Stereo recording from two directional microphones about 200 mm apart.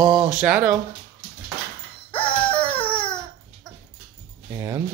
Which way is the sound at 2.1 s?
25° left (ahead or behind).